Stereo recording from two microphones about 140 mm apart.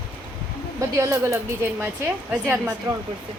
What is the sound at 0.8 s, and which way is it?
Speech, 20° right (ahead or behind).